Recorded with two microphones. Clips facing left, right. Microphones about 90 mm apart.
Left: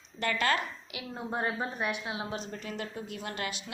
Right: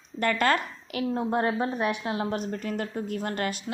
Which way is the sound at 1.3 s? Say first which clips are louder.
Right 4 dB; 90° right.